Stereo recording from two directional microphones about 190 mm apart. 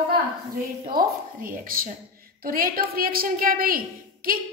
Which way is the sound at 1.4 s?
45° right (ahead or behind).